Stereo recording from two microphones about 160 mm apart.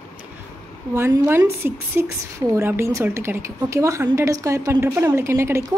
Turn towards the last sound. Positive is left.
turn(degrees=-15)  # may be behind; listen again after turning